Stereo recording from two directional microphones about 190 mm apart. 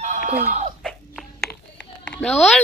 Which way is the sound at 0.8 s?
Centre (ahead or behind).